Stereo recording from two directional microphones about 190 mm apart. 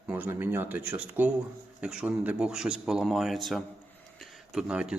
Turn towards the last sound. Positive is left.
turn(degrees=-5)  # may be behind; listen again after turning